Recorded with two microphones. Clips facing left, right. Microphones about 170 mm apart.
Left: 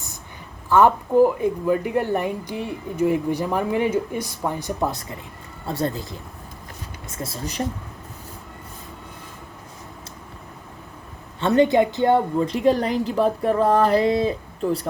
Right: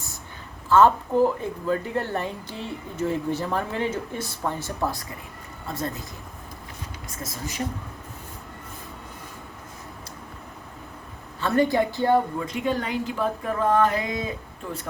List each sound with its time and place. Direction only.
0.7 s a woman's voice: 15° left (ahead or behind)
5.6 s a woman's voice: 30° left (ahead or behind)
7.1 s a sound: 30° left (ahead or behind)
11.3 s a woman's voice: 25° left (ahead or behind)